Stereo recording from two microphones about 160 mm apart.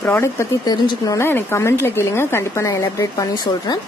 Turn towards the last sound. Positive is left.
turn(degrees=25)  # may be behind; listen again after turning